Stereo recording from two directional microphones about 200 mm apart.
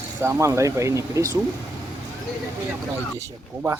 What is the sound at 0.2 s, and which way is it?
Speech, 15° right (ahead or behind).